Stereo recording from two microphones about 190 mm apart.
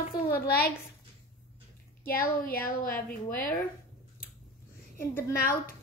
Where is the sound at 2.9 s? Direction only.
50° left (ahead or behind).